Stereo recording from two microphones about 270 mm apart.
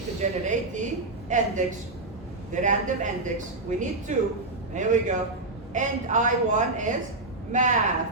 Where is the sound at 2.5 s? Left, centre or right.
Right.